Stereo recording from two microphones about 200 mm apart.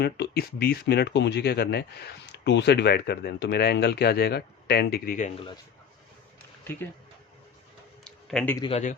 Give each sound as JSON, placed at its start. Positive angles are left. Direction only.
{"t": 0.0, "sound": "speech", "side_deg": 55}
{"t": 8.0, "sound": "a sound", "side_deg": 5}
{"t": 8.5, "sound": "a man's voice", "side_deg": 25}